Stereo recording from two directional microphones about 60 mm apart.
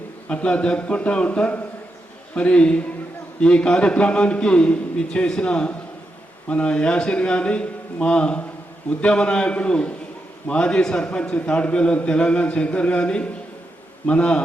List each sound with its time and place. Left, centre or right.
0.3 s a man's voice: left